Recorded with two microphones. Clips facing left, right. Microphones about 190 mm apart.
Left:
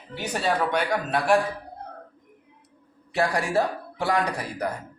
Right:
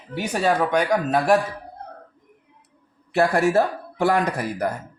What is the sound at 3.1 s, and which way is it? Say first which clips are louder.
Speech: right 5 dB; 50° right (ahead or behind).